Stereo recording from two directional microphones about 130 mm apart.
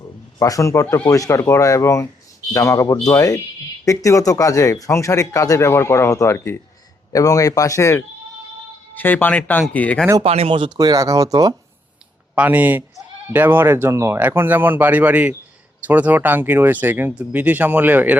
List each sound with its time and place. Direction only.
0.0 s speech: 25° left (ahead or behind); by 10.1 s 10° left (ahead or behind)
10.2 s speech: 50° right (ahead or behind)
10.8 s speech: 30° right (ahead or behind)
12.3 s speech: 10° right (ahead or behind)